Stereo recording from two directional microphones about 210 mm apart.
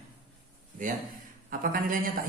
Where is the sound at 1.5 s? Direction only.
40° right (ahead or behind).